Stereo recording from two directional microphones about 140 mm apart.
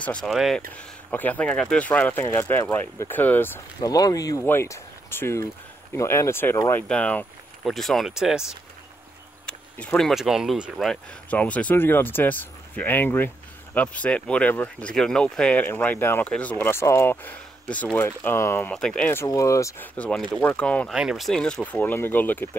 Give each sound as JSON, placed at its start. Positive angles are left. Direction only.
{"t": 0.0, "sound": "speech", "side_deg": 5}
{"t": 0.7, "sound": "speech", "side_deg": 10}
{"t": 3.8, "sound": "speech", "side_deg": 25}
{"t": 6.9, "sound": "speech", "side_deg": 10}
{"t": 9.5, "sound": "speech", "side_deg": 5}
{"t": 18.7, "sound": "speech", "side_deg": 5}
{"t": 19.2, "sound": "speech", "side_deg": 25}
{"t": 20.0, "sound": "speech", "side_deg": 5}
{"t": 20.9, "sound": "speech", "side_deg": -5}